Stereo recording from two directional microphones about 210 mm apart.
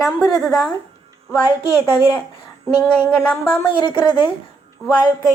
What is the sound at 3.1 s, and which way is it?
Speech, 5° left (ahead or behind).